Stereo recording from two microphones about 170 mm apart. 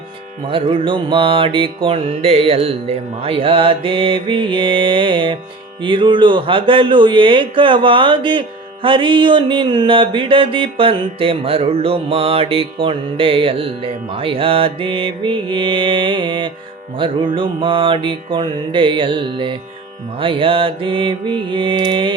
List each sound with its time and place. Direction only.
0.4 s speech: 30° right (ahead or behind)
17.0 s mantra: 30° right (ahead or behind)
20.1 s speech: 30° right (ahead or behind)